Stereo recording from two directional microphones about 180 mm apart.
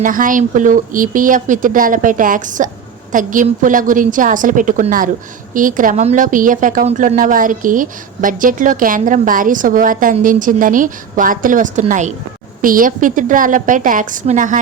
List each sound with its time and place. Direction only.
0.0 s a woman's voice: 50° right (ahead or behind)